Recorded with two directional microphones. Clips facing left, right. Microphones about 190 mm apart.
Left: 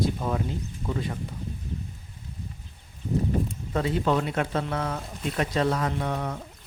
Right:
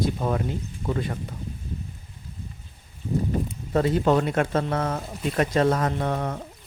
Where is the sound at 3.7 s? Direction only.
45° right (ahead or behind).